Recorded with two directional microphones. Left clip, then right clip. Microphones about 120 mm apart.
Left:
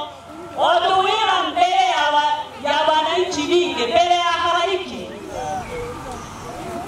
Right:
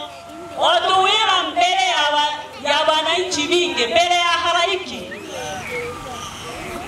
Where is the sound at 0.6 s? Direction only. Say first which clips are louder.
Right 1 dB; 15° right (ahead or behind).